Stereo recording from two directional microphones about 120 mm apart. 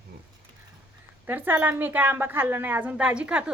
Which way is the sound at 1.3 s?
15° right (ahead or behind).